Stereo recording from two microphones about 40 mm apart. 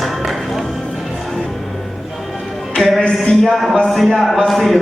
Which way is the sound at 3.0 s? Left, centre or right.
Left.